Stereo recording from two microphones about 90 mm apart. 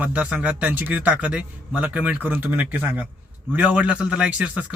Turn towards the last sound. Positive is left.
turn(degrees=-15)  # may be behind; listen again after turning